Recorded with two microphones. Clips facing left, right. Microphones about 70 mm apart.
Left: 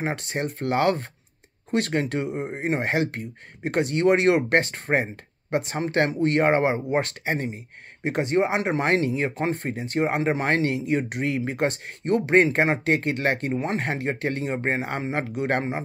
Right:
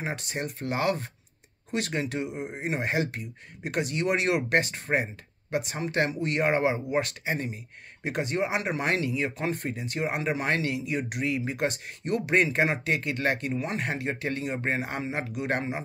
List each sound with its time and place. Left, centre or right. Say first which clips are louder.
0.0 s speech: left 5 dB; left